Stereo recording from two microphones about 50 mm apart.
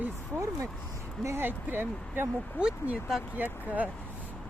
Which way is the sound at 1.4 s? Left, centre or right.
Right.